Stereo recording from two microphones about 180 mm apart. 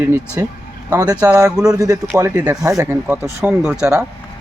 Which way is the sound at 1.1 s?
10° right (ahead or behind).